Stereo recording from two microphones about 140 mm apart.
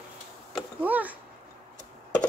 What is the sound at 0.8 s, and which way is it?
Speech, 10° right (ahead or behind).